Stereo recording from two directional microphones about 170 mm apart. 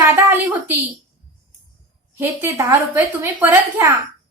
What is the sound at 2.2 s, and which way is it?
A woman's voice, 15° right (ahead or behind).